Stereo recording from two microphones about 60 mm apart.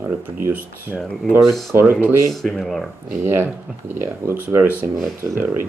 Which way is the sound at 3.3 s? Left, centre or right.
Right.